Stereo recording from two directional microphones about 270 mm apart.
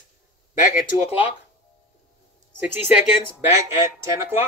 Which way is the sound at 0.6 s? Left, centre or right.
Left.